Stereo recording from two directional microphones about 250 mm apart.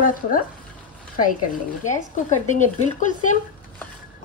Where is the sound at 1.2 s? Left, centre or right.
Left.